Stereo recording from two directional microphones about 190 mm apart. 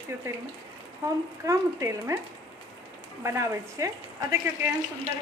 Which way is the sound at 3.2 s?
15° right (ahead or behind).